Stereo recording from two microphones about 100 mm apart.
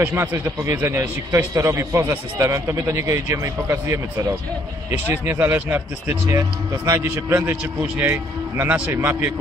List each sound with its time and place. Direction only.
0.0 s speech: 20° right (ahead or behind)